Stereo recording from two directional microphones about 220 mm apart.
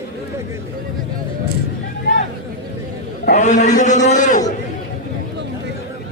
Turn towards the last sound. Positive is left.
turn(degrees=35)  # may be behind; listen again after turning